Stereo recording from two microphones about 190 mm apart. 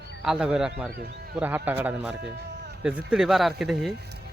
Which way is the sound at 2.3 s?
60° right (ahead or behind).